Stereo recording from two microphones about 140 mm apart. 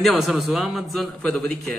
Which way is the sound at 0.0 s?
Centre (ahead or behind).